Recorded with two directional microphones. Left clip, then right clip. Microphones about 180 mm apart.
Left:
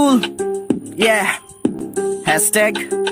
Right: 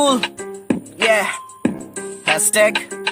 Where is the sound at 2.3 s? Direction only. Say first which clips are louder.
Right 2 dB; 35° left (ahead or behind).